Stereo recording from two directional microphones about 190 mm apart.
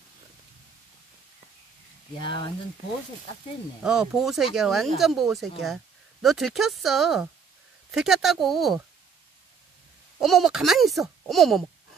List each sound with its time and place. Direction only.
2.2 s speech: 25° left (ahead or behind)
3.8 s speech: 5° right (ahead or behind)
10.2 s speech: centre (ahead or behind)